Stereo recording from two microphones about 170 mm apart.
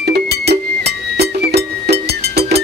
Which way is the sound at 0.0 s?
70° right (ahead or behind).